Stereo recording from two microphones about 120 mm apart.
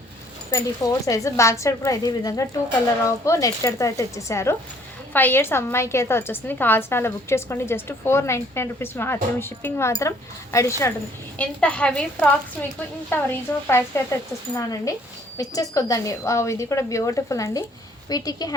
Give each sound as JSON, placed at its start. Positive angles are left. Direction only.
{"t": 0.5, "sound": "a woman's voice", "side_deg": 25}
{"t": 11.3, "sound": "a woman's voice", "side_deg": 10}